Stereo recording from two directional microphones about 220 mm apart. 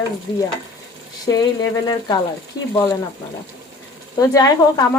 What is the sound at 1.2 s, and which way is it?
Speech, 15° left (ahead or behind).